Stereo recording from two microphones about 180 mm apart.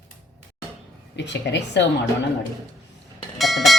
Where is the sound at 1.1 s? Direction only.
75° left (ahead or behind).